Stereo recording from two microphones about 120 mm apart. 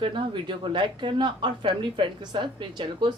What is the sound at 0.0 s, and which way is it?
A woman's voice, 45° right (ahead or behind).